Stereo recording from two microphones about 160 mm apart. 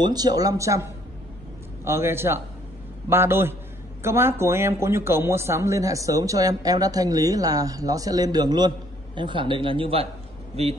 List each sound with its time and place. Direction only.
0.0 s speech: 25° right (ahead or behind)
1.9 s a man's voice: 15° right (ahead or behind); by 10.8 s 40° right (ahead or behind)